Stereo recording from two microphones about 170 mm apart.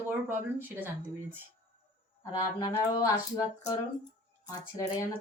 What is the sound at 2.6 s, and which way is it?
Speech, 20° left (ahead or behind).